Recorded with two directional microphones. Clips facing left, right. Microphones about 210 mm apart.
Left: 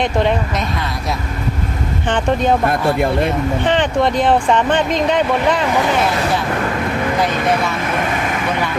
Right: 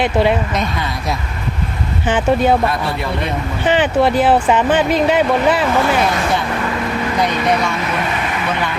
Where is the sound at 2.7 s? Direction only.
50° left (ahead or behind).